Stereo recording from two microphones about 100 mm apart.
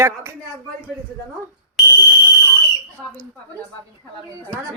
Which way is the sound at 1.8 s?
Centre (ahead or behind).